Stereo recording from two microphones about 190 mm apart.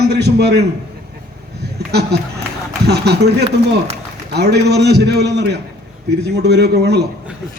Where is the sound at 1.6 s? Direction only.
60° right (ahead or behind).